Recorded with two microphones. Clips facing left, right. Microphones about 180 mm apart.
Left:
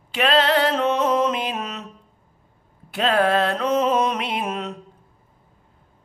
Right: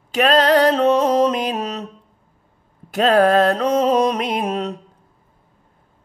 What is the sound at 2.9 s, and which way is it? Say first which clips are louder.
Music: right 5 dB; 40° right (ahead or behind).